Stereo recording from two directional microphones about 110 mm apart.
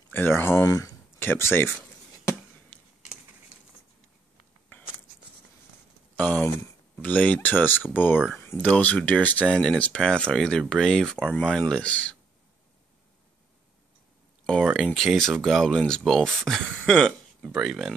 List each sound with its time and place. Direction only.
0.1 s speech: 20° left (ahead or behind)
0.7 s speech: 35° left (ahead or behind)
1.2 s a sound: 20° left (ahead or behind)
6.1 s speech: 15° left (ahead or behind)
14.4 s speech: 5° left (ahead or behind)
16.8 s a sound: 5° left (ahead or behind)
17.6 s speech: centre (ahead or behind)